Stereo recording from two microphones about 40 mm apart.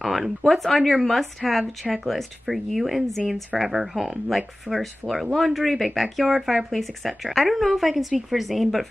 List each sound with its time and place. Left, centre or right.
0.0 s speech: centre